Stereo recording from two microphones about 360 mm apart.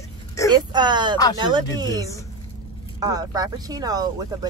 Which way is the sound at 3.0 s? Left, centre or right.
Centre.